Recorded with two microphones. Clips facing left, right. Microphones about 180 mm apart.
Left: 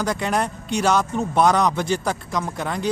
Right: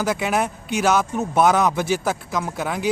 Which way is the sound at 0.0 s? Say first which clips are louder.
Right 1 dB; 5° right (ahead or behind).